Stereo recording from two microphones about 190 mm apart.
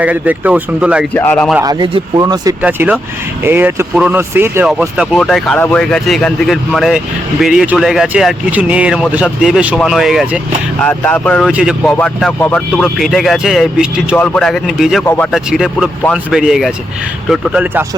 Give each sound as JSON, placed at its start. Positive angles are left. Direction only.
{"t": 0.0, "sound": "speech", "side_deg": -10}
{"t": 1.1, "sound": "speech", "side_deg": 10}
{"t": 1.6, "sound": "speech", "side_deg": -25}
{"t": 2.6, "sound": "speech", "side_deg": -10}
{"t": 4.8, "sound": "speech", "side_deg": 0}
{"t": 11.5, "sound": "speech", "side_deg": -5}
{"t": 11.9, "sound": "speech", "side_deg": 5}